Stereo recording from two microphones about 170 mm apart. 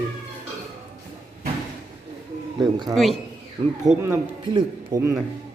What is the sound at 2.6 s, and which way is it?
Speech, 25° right (ahead or behind).